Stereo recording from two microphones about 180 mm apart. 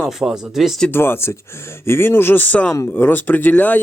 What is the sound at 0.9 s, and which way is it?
Speech, 10° left (ahead or behind).